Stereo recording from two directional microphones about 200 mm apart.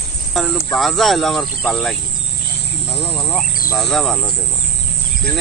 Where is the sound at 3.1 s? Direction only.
Centre (ahead or behind).